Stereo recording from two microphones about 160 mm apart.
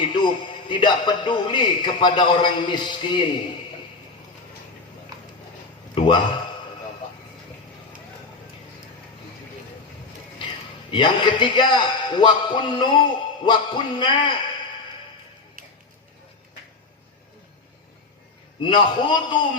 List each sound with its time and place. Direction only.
0.0 s a man's voice: 30° left (ahead or behind)
5.9 s a man's voice: 30° left (ahead or behind)
10.9 s a man's voice: 30° left (ahead or behind)
18.6 s a man's voice: 30° left (ahead or behind)